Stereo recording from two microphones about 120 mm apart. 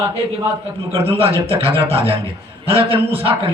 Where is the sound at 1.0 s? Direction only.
55° right (ahead or behind).